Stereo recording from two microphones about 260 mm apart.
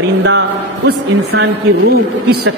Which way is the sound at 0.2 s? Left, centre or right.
Right.